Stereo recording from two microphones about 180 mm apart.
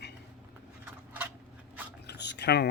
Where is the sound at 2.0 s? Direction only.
70° left (ahead or behind).